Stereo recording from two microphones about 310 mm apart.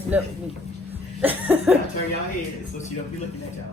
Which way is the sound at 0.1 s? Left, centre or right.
Centre.